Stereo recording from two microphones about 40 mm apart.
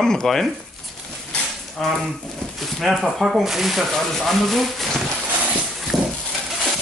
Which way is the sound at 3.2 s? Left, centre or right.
Centre.